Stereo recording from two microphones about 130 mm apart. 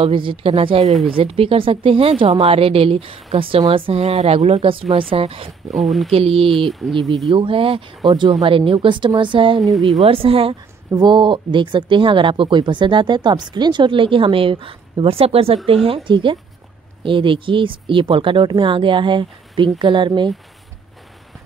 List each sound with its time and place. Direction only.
0.0 s a woman's voice: 40° right (ahead or behind)
5.7 s speech: centre (ahead or behind)
6.1 s a woman's voice: 45° right (ahead or behind)
6.7 s speech: centre (ahead or behind)
7.2 s a woman's voice: 40° right (ahead or behind)
9.6 s speech: centre (ahead or behind)
10.0 s a woman's voice: 45° right (ahead or behind)
10.9 s speech: 35° right (ahead or behind)